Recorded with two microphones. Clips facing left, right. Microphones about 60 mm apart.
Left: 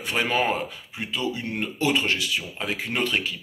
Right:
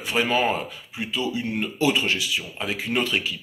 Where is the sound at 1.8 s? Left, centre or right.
Left.